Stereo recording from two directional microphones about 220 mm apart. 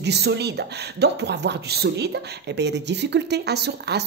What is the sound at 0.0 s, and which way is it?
Speech, 50° right (ahead or behind).